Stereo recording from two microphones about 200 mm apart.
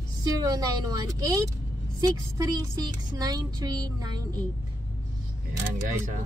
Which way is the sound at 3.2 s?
20° right (ahead or behind).